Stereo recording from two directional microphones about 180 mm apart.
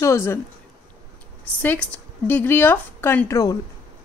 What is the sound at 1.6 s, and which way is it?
Speech, 10° left (ahead or behind).